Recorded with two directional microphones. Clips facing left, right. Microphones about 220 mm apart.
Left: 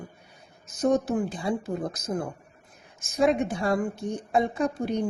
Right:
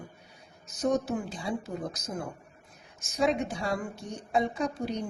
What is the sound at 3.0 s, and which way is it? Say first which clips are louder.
A woman's voice: left 4 dB; 50° left (ahead or behind).